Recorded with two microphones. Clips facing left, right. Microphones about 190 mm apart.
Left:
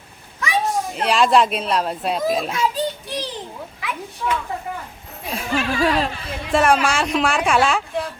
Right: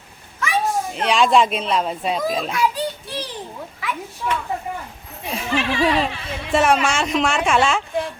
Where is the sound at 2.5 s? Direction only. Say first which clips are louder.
Right 1 dB; 25° left (ahead or behind).